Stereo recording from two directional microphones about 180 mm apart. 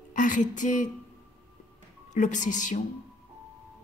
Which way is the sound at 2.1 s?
45° left (ahead or behind).